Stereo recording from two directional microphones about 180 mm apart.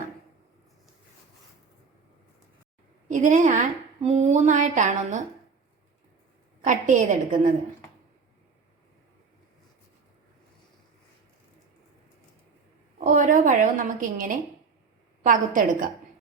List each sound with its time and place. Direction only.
3.1 s a woman's voice: 45° right (ahead or behind)
6.7 s a woman's voice: 45° right (ahead or behind)
13.1 s a woman's voice: 45° right (ahead or behind)